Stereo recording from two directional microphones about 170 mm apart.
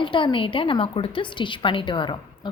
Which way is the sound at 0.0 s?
30° left (ahead or behind).